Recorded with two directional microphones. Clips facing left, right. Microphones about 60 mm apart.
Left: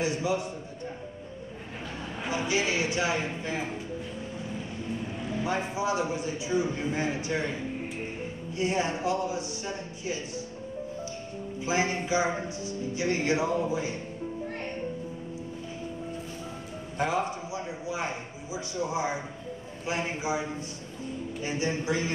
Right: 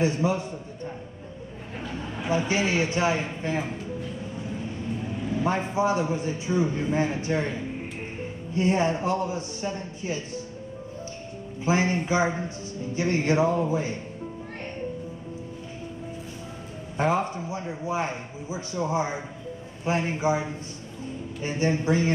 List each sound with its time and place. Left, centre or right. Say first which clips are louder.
0.0 s a man's voice: right 4 dB; right
2.3 s a man's voice: right 4 dB; right
5.4 s a man's voice: right 5 dB; right
8.5 s a man's voice: right 5 dB; right
11.6 s a man's voice: right 4 dB; right
17.0 s a man's voice: right 4 dB; right
21.4 s a man's voice: right 5 dB; right